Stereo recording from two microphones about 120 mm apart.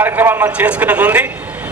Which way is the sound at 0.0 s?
15° right (ahead or behind).